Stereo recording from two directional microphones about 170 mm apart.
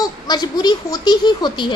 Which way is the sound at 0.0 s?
25° left (ahead or behind).